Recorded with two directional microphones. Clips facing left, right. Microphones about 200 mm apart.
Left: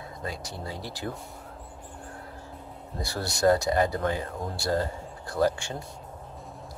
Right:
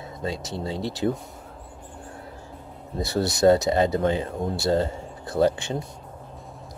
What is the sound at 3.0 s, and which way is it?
Speech, 20° right (ahead or behind).